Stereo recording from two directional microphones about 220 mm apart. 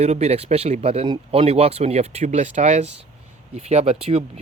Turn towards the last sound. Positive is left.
turn(degrees=-30)  # may be behind; listen again after turning